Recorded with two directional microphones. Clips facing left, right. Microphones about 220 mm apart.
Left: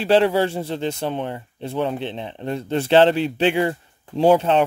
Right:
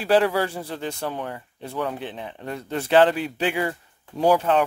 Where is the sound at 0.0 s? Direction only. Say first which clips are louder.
Left 3 dB; 25° left (ahead or behind).